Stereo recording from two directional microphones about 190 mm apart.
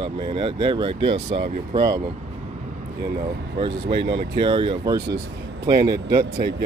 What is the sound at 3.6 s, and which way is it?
Speech, 25° right (ahead or behind).